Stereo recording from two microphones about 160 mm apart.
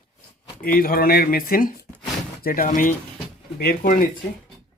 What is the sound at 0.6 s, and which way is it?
Speech, 70° left (ahead or behind).